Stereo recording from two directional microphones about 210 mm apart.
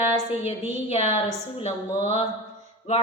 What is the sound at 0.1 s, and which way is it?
A woman's voice, 30° left (ahead or behind).